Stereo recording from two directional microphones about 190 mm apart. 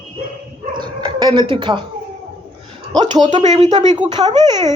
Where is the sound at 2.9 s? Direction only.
20° right (ahead or behind).